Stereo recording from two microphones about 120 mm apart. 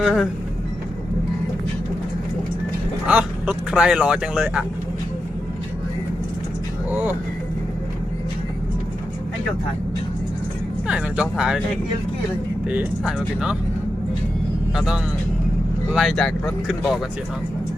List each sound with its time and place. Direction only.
0.0 s speech: centre (ahead or behind)
3.1 s speech: 10° right (ahead or behind)
6.9 s speech: 15° right (ahead or behind)
10.8 s speech: 10° right (ahead or behind)
12.6 s speech: 10° right (ahead or behind)
14.8 s speech: 5° right (ahead or behind)